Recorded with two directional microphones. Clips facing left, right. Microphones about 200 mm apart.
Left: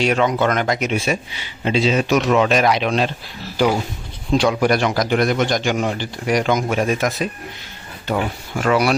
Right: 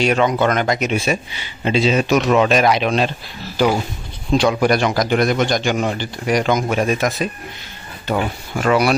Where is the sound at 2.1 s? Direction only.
15° right (ahead or behind).